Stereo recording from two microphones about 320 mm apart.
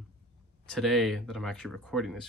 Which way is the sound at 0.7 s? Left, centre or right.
Centre.